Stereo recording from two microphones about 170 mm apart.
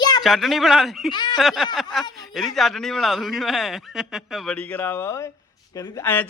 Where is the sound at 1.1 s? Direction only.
25° left (ahead or behind).